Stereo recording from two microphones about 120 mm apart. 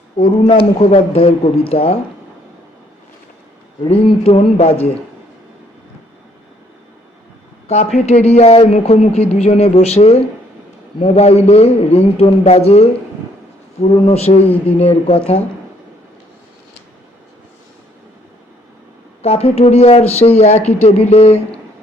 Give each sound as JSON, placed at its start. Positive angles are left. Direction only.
{"t": 0.4, "sound": "speech", "side_deg": 55}
{"t": 3.8, "sound": "speech", "side_deg": 50}
{"t": 7.9, "sound": "speech", "side_deg": 65}
{"t": 13.9, "sound": "speech", "side_deg": 60}
{"t": 19.2, "sound": "speech", "side_deg": 60}